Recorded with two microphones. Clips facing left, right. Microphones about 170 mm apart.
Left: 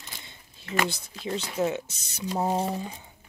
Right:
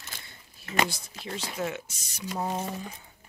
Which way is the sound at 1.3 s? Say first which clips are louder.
Left 5 dB; 25° left (ahead or behind).